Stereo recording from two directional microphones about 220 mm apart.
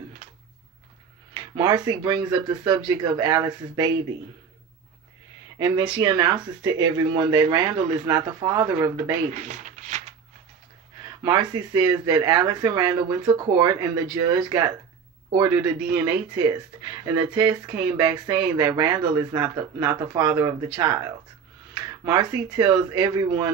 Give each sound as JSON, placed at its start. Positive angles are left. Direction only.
{"t": 1.3, "sound": "speech", "side_deg": -20}
{"t": 5.6, "sound": "speech", "side_deg": -20}
{"t": 9.3, "sound": "a sound", "side_deg": -35}
{"t": 11.2, "sound": "speech", "side_deg": -20}